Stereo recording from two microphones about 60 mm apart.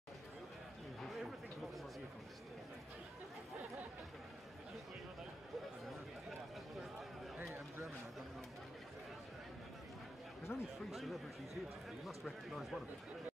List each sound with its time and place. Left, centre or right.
1.0 s a sound: centre
10.5 s chatter: left
10.9 s speech: centre